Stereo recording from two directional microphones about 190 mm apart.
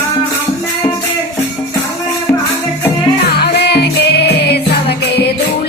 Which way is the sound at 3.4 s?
60° left (ahead or behind).